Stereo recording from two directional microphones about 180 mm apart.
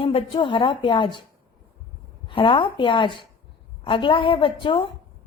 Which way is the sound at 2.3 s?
30° left (ahead or behind).